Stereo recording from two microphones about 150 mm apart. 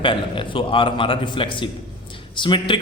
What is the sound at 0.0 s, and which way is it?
A man's voice, 35° left (ahead or behind).